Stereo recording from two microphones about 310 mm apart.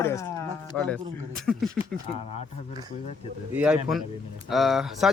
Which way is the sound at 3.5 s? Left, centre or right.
Centre.